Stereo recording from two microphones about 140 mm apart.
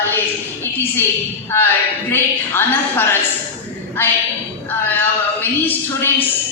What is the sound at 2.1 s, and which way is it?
Speech, 15° left (ahead or behind).